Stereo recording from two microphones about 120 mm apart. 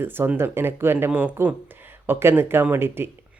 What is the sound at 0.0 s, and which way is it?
Speech, 20° right (ahead or behind).